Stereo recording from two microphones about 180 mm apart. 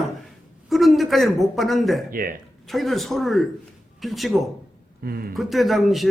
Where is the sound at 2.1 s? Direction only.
50° right (ahead or behind).